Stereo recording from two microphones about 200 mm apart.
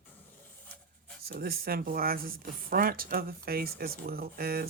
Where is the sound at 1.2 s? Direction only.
50° right (ahead or behind).